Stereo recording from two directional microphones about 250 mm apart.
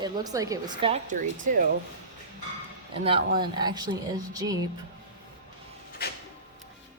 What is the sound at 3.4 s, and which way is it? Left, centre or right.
A woman's voice, centre.